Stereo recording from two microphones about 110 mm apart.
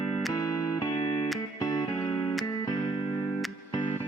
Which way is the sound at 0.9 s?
50° left (ahead or behind).